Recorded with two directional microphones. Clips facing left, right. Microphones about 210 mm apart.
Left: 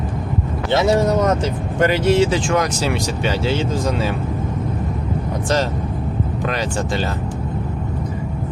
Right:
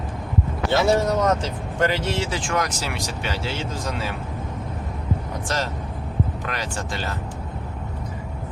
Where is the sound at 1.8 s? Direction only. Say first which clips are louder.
Left 8 dB; 15° left (ahead or behind).